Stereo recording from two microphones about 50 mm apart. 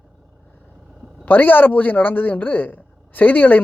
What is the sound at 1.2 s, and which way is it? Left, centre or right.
A man's voice, left.